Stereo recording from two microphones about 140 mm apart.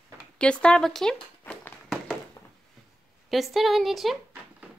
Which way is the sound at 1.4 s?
10° left (ahead or behind).